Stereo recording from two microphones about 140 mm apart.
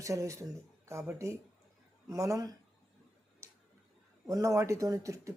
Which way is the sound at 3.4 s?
20° right (ahead or behind).